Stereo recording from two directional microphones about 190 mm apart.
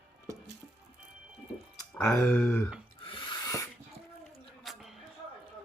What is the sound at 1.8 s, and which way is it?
Speech, 15° left (ahead or behind).